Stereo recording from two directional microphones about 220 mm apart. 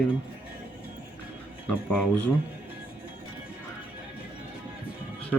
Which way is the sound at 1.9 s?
5° left (ahead or behind).